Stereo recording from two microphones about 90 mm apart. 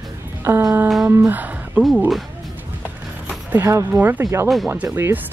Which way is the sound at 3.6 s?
30° right (ahead or behind).